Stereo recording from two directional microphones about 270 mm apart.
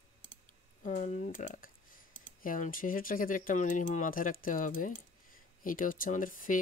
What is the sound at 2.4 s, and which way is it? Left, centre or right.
Speech, left.